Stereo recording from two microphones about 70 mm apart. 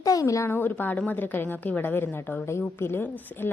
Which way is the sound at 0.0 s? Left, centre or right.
Left.